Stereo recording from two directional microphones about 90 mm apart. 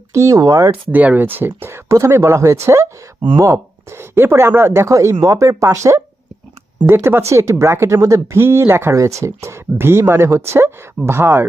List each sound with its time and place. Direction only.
0.1 s speech: 35° right (ahead or behind)
0.9 s speech: 15° right (ahead or behind)